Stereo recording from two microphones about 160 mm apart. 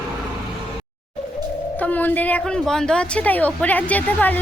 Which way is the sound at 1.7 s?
10° left (ahead or behind).